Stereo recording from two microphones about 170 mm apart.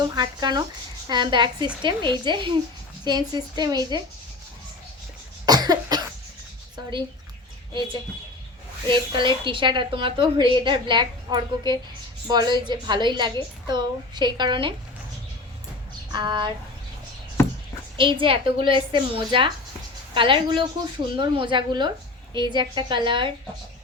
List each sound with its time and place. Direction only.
0.0 s a woman's voice: 25° right (ahead or behind)
5.5 s cough: 25° right (ahead or behind)
8.9 s a woman's voice: 30° right (ahead or behind)
16.1 s a woman's voice: 25° right (ahead or behind)
17.4 s a sound: 15° left (ahead or behind)
17.9 s a woman's voice: 30° right (ahead or behind)